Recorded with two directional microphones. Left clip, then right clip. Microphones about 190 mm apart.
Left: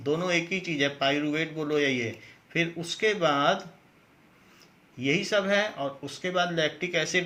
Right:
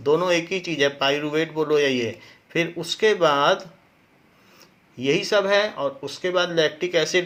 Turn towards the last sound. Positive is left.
turn(degrees=-45)  # may be behind; listen again after turning